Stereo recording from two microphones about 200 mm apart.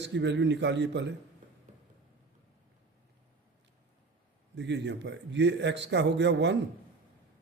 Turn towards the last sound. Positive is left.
turn(degrees=-60)  # may be behind; listen again after turning